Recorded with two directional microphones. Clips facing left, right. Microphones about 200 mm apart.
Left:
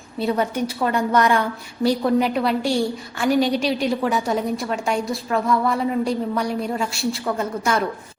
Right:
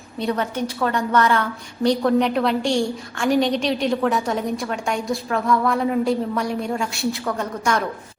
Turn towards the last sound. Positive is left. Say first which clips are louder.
# left 1 dB
turn(degrees=5)  # may be behind; listen again after turning